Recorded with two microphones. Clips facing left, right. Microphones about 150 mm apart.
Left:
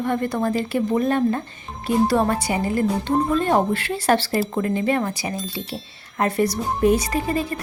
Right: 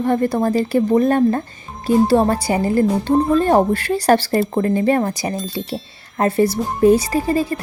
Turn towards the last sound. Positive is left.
turn(degrees=-35)  # may be behind; listen again after turning